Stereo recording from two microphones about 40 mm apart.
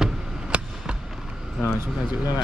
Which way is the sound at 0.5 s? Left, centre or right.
Right.